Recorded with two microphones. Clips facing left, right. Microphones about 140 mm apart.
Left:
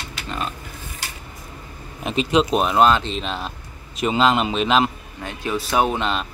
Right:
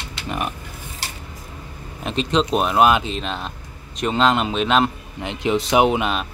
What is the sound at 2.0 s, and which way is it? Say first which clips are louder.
Speech: left 1 dB; 5° left (ahead or behind).